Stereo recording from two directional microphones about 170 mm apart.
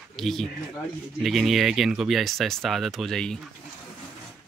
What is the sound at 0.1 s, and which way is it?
Speech, centre (ahead or behind).